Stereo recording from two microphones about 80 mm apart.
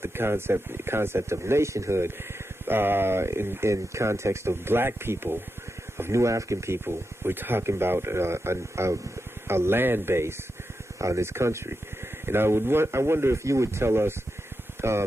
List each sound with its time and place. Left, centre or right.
0.0 s speech: right